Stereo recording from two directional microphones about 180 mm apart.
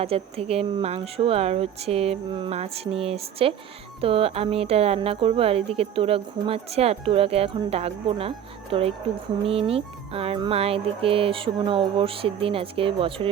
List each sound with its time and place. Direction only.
0.0 s speech: 35° right (ahead or behind)